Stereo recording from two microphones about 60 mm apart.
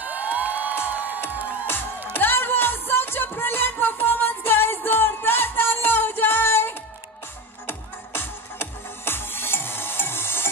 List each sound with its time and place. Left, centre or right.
0.0 s music: right
2.1 s music: left